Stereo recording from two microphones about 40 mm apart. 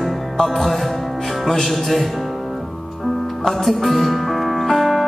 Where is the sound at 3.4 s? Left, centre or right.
Centre.